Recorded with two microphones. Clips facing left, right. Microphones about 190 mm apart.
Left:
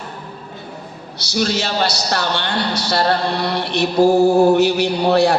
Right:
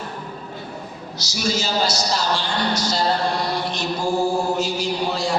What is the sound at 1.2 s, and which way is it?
A man's voice, 65° left (ahead or behind).